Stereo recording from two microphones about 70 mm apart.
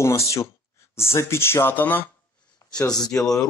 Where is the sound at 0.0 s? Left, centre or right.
Left.